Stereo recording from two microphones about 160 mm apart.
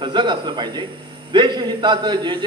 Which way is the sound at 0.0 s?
30° right (ahead or behind).